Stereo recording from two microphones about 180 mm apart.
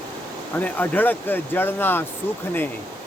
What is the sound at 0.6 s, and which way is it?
Speech, 10° left (ahead or behind).